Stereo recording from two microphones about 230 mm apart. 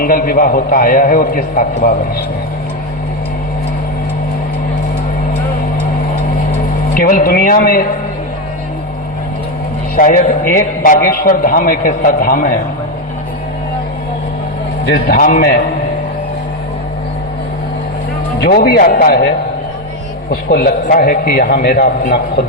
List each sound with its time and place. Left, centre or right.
0.0 s a man's voice: left
6.9 s a man's voice: left
9.9 s a man's voice: left
14.8 s a man's voice: left
18.4 s a man's voice: left
20.3 s a man's voice: left